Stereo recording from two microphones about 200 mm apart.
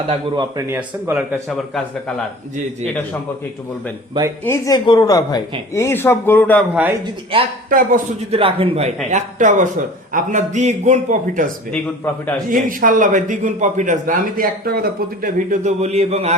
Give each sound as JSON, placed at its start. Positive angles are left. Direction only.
{"t": 0.1, "sound": "a man's voice", "side_deg": -20}
{"t": 0.7, "sound": "speech", "side_deg": -10}
{"t": 4.4, "sound": "a woman's voice", "side_deg": 15}
{"t": 7.7, "sound": "a man's voice", "side_deg": -40}
{"t": 8.4, "sound": "a man's voice", "side_deg": -25}
{"t": 12.5, "sound": "a man's voice", "side_deg": -45}